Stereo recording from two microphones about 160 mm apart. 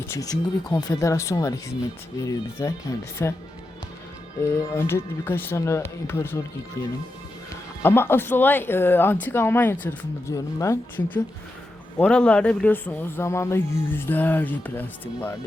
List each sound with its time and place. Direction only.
0.1 s speech: 20° left (ahead or behind)
4.5 s speech: 15° left (ahead or behind)